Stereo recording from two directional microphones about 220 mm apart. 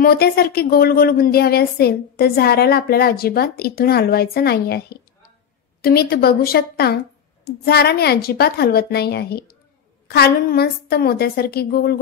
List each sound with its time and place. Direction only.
0.0 s a woman's voice: 45° left (ahead or behind)